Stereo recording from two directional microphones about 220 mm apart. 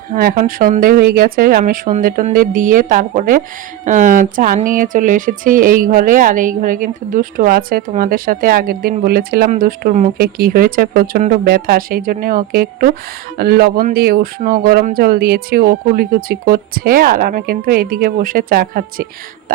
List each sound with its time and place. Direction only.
0.1 s speech: 40° right (ahead or behind)